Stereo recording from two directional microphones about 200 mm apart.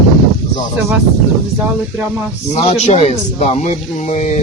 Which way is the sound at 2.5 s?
30° left (ahead or behind).